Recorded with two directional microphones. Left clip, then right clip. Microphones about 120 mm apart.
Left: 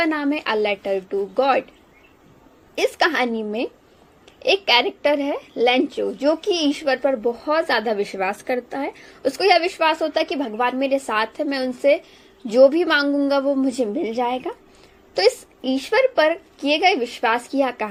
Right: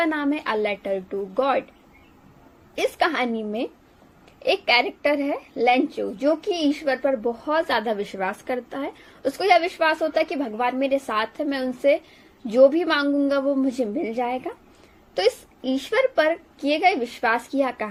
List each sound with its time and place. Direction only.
0.0 s a child's voice: 50° left (ahead or behind)
2.7 s a child's voice: 45° left (ahead or behind)
15.1 s a child's voice: 45° left (ahead or behind)